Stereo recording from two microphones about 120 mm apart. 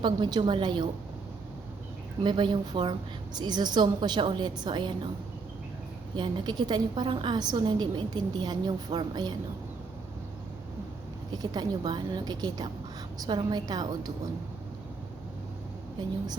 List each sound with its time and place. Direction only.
0.0 s a woman's voice: 40° right (ahead or behind)
2.2 s a woman's voice: 40° right (ahead or behind)
6.1 s a woman's voice: 40° right (ahead or behind)
11.3 s a woman's voice: 40° right (ahead or behind)
16.0 s a woman's voice: 35° right (ahead or behind)